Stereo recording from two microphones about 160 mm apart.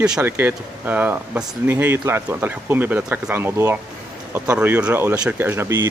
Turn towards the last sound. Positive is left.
turn(degrees=-15)  # may be behind; listen again after turning